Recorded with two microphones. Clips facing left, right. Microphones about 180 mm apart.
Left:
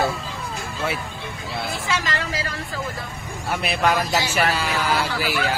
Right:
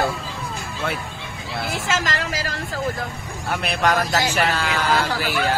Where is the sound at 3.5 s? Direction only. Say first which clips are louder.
Even; 5° left (ahead or behind).